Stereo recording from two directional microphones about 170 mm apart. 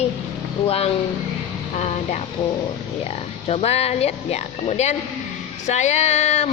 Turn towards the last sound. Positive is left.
turn(degrees=40)  # may be behind; listen again after turning